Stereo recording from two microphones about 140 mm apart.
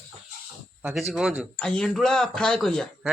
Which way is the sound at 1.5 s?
5° left (ahead or behind).